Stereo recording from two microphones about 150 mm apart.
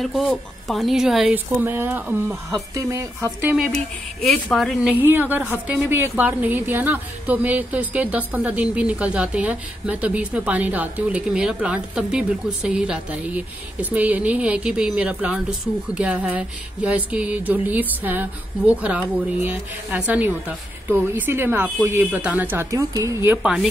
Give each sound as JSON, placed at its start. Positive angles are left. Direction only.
{"t": 0.0, "sound": "speech", "side_deg": 0}
{"t": 2.5, "sound": "speech", "side_deg": -20}
{"t": 3.5, "sound": "speech", "side_deg": 0}
{"t": 5.0, "sound": "a woman's voice", "side_deg": -10}
{"t": 23.4, "sound": "speech", "side_deg": 0}